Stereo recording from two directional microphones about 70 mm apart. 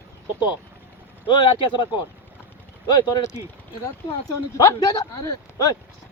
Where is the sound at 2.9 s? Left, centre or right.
Left.